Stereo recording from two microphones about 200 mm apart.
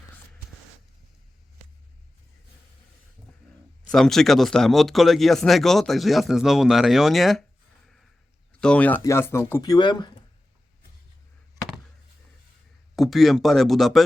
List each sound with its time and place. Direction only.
3.8 s speech: centre (ahead or behind)
8.6 s speech: 5° left (ahead or behind); by 10.1 s 20° left (ahead or behind)
13.0 s speech: centre (ahead or behind)